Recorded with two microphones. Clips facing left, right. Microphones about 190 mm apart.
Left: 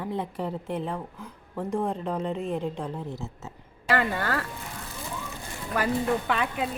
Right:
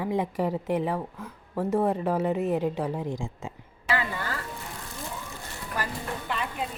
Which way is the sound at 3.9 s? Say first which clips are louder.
Left 4 dB; 60° left (ahead or behind).